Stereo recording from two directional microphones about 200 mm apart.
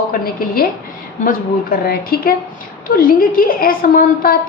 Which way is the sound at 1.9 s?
50° left (ahead or behind).